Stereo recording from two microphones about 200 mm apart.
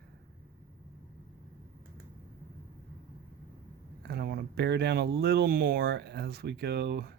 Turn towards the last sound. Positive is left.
turn(degrees=-55)  # may be behind; listen again after turning